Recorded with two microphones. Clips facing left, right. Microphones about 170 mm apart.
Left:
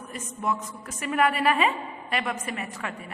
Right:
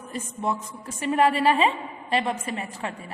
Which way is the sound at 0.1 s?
30° right (ahead or behind).